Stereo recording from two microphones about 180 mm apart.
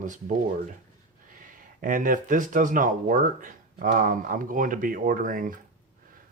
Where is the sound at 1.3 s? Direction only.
50° right (ahead or behind).